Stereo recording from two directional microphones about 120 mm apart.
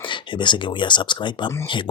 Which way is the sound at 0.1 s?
40° left (ahead or behind).